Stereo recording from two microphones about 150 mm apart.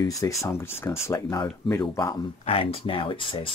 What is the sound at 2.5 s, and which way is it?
Speech, 40° left (ahead or behind).